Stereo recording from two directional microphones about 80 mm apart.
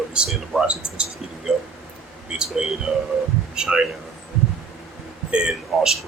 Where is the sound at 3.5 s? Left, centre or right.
Centre.